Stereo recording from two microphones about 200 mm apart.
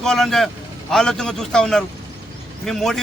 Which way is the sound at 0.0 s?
Centre (ahead or behind).